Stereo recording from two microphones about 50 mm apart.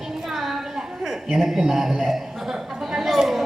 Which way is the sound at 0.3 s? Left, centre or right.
Centre.